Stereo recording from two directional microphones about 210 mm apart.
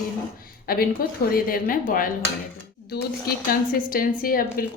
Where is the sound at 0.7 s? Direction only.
45° left (ahead or behind).